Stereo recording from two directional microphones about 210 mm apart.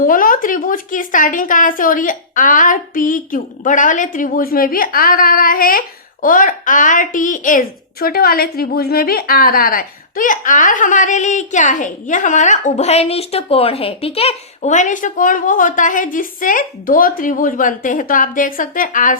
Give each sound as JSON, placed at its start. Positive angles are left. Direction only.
{"t": 0.0, "sound": "a woman's voice", "side_deg": 40}